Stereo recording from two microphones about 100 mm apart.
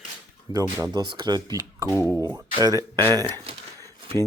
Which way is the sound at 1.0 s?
45° right (ahead or behind).